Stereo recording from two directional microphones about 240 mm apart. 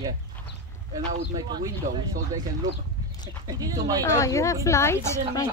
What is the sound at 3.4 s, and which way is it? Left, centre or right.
Speech, centre.